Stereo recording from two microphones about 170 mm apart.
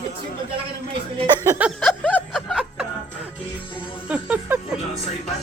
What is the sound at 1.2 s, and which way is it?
Speech, 15° right (ahead or behind).